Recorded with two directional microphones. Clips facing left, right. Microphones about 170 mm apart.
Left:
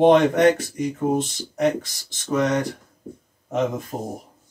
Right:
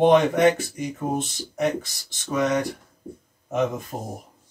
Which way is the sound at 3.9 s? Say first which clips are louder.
Left 3 dB; 10° left (ahead or behind).